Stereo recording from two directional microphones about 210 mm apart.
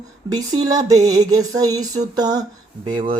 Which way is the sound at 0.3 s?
20° right (ahead or behind).